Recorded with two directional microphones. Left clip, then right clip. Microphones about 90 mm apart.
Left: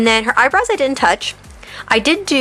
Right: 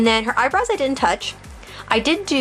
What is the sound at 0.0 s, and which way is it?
Speech, 25° left (ahead or behind).